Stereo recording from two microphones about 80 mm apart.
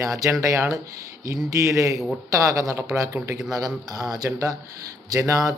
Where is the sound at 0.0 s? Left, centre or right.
Right.